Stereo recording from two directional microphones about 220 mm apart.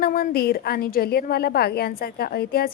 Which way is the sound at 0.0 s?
40° left (ahead or behind).